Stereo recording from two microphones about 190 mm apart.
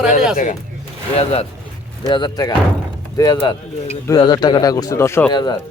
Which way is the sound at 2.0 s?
25° left (ahead or behind).